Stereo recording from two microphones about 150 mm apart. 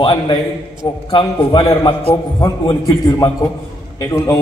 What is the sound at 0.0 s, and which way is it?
A man's voice, 30° left (ahead or behind).